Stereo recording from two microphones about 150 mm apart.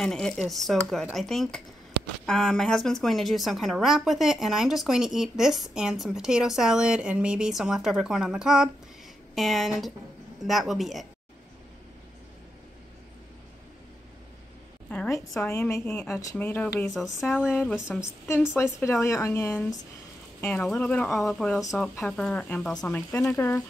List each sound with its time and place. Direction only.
0.0 s speech: 5° left (ahead or behind)
14.9 s a sound: 15° left (ahead or behind)
15.4 s a woman's voice: 20° left (ahead or behind)
16.9 s speech: centre (ahead or behind)
17.5 s a woman's voice: 10° left (ahead or behind)
17.8 s speech: centre (ahead or behind)
18.6 s a woman's voice: 20° left (ahead or behind)